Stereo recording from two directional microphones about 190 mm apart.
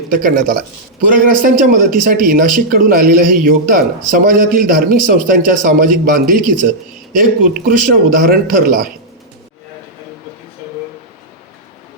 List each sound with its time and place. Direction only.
0.1 s a man's voice: 45° right (ahead or behind)